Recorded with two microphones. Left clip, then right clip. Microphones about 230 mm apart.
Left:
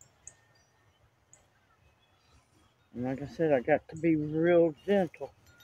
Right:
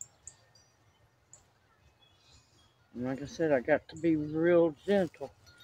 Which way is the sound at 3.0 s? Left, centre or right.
Left.